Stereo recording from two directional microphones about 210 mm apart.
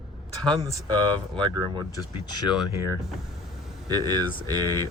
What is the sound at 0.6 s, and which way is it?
Speech, 20° right (ahead or behind).